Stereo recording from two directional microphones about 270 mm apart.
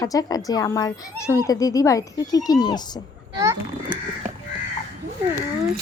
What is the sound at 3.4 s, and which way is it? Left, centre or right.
Speech, centre.